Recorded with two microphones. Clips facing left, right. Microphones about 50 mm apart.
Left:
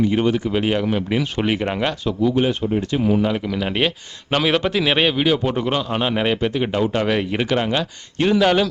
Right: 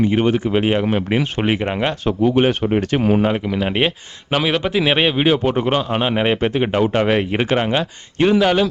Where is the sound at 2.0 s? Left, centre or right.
Right.